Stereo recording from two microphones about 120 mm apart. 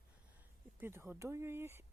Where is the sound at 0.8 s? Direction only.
20° right (ahead or behind).